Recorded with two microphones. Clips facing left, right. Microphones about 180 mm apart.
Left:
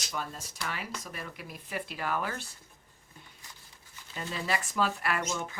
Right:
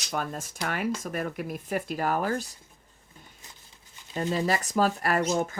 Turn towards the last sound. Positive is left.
turn(degrees=-40)  # may be behind; listen again after turning